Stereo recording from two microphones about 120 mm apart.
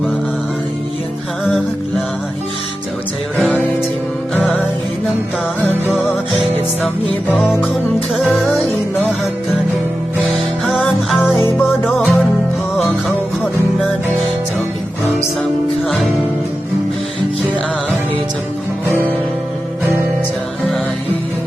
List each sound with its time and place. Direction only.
3.3 s music: centre (ahead or behind)
8.2 s music: centre (ahead or behind)
10.2 s music: centre (ahead or behind)